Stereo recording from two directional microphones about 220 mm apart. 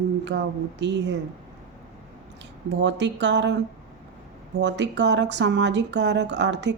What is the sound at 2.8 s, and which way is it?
Speech, 55° right (ahead or behind).